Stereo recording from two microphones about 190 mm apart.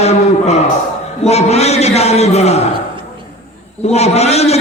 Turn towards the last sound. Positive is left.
turn(degrees=35)  # may be behind; listen again after turning